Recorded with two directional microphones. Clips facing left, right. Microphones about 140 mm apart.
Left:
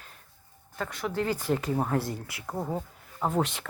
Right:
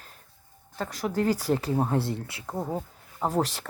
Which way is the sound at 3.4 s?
35° right (ahead or behind).